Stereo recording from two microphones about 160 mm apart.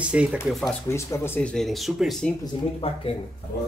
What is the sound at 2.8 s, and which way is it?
Speech, 35° left (ahead or behind).